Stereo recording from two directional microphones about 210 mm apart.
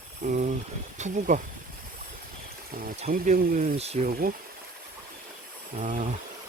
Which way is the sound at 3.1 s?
40° right (ahead or behind).